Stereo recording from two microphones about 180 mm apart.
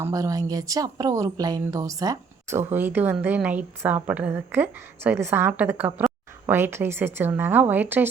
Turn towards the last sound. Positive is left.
turn(degrees=-10)  # may be behind; listen again after turning